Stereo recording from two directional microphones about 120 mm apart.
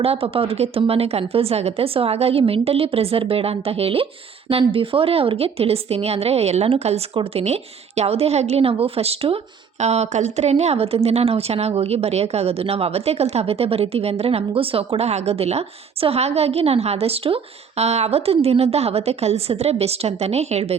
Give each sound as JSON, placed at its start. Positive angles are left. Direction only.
{"t": 0.0, "sound": "a woman's voice", "side_deg": -50}
{"t": 9.8, "sound": "a woman's voice", "side_deg": -65}